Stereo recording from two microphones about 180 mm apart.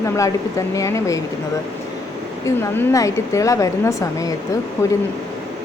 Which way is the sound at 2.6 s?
15° left (ahead or behind).